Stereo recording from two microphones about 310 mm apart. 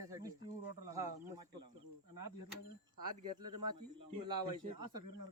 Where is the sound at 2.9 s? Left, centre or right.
Right.